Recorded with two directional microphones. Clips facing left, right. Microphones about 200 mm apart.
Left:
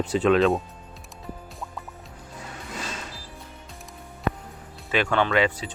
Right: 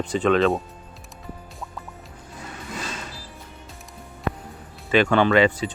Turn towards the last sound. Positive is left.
turn(degrees=5)  # may be behind; listen again after turning